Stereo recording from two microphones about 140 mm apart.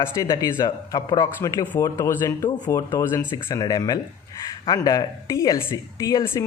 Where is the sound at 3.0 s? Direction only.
20° left (ahead or behind).